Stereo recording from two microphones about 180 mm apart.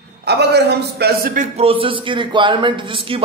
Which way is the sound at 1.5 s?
30° right (ahead or behind).